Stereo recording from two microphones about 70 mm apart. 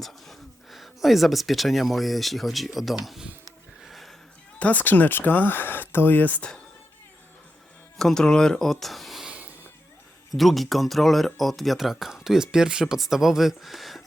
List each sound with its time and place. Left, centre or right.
0.0 s speech: centre
3.8 s a sound: centre
4.6 s speech: left
7.9 s speech: centre
9.2 s music: right
10.3 s speech: centre